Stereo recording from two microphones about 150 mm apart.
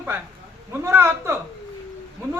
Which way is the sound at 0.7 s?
15° right (ahead or behind).